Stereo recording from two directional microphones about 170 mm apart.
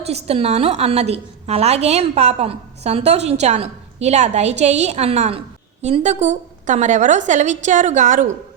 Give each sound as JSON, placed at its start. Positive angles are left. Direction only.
{"t": 0.3, "sound": "a woman's voice", "side_deg": -40}